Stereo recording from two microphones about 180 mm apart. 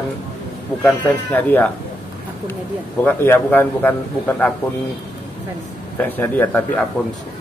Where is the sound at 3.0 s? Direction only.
10° left (ahead or behind).